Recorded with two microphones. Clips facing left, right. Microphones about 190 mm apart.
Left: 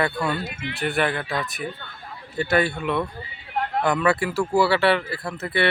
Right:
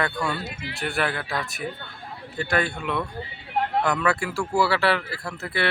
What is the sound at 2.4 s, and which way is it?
Speech, 5° left (ahead or behind).